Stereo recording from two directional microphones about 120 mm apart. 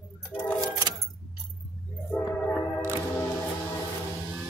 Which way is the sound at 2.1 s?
10° left (ahead or behind).